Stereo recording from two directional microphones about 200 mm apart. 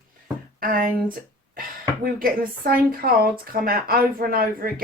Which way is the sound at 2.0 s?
45° right (ahead or behind).